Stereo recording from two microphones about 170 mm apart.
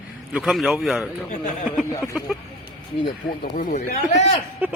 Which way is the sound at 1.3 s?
50° left (ahead or behind).